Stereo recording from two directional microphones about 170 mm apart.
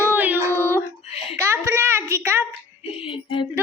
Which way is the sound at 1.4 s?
15° right (ahead or behind).